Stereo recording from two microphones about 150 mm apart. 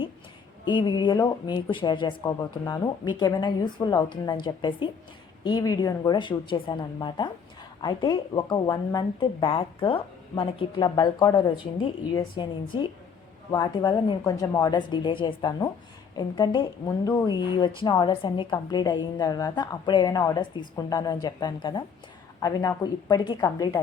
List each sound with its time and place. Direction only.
0.6 s a woman's voice: 30° left (ahead or behind)